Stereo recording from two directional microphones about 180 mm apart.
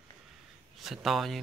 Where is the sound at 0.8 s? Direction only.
Centre (ahead or behind).